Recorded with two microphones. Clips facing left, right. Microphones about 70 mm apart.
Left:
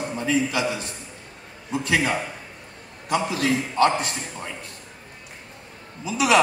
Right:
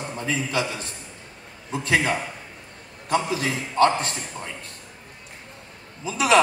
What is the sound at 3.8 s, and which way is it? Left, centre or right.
Speech, right.